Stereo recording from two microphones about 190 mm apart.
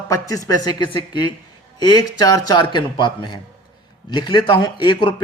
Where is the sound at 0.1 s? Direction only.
20° left (ahead or behind).